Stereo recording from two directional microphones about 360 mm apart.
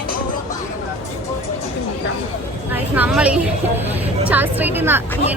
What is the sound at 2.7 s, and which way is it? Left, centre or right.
A woman's voice, centre.